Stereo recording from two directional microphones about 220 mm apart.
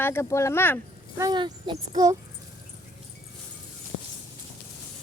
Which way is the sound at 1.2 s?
20° right (ahead or behind).